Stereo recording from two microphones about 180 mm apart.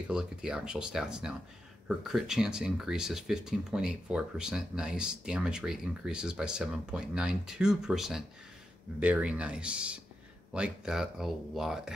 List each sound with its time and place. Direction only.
0.1 s speech: 5° right (ahead or behind)